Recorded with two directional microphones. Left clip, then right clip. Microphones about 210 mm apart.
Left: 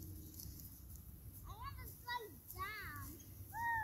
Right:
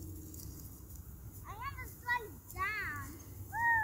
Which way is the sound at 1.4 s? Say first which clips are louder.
Right 9 dB; 15° right (ahead or behind).